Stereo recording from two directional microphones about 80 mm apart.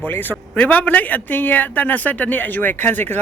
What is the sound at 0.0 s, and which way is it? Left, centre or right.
Speech, left.